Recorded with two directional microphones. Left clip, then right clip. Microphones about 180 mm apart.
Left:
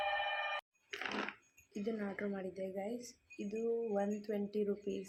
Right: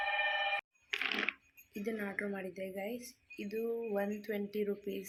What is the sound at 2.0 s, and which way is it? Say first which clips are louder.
Speech: right 3 dB; 5° right (ahead or behind).